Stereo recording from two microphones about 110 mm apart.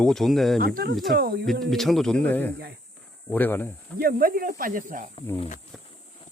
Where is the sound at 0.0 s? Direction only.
Centre (ahead or behind).